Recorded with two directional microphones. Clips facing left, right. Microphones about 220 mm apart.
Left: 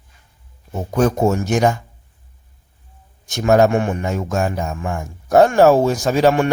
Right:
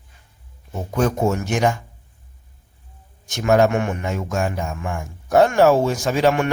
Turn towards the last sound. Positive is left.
turn(degrees=35)  # may be behind; listen again after turning